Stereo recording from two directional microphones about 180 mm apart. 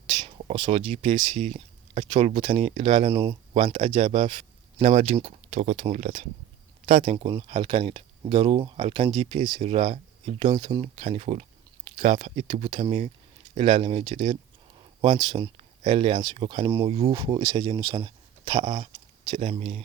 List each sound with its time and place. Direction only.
0.5 s speech: 25° right (ahead or behind)
1.0 s speech: 40° right (ahead or behind)
4.0 s speech: 30° right (ahead or behind)